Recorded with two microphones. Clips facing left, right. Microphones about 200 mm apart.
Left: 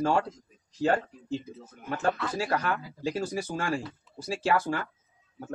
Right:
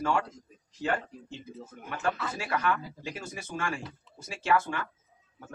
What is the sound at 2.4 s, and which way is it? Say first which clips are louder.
Speech: left 1 dB; 35° left (ahead or behind).